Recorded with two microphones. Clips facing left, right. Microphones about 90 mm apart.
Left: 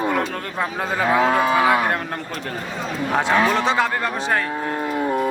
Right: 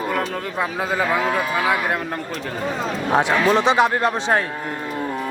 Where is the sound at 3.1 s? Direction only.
15° right (ahead or behind).